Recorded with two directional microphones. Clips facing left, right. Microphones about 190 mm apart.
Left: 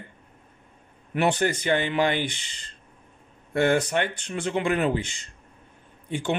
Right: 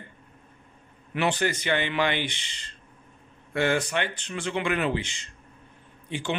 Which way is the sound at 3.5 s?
50° left (ahead or behind).